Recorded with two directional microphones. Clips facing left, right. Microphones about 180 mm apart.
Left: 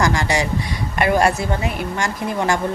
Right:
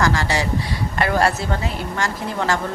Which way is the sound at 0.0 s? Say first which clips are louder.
Left 1 dB; 15° left (ahead or behind).